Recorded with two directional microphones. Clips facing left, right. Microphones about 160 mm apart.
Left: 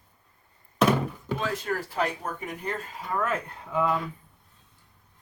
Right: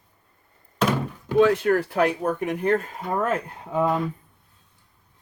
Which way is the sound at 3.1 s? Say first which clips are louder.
Right 4 dB; 40° right (ahead or behind).